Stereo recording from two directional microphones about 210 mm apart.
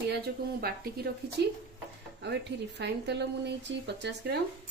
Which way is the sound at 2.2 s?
55° right (ahead or behind).